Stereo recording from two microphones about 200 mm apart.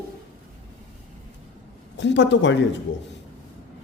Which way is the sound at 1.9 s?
65° left (ahead or behind).